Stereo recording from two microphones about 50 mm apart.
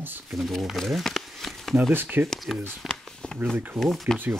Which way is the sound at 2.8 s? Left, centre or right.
Centre.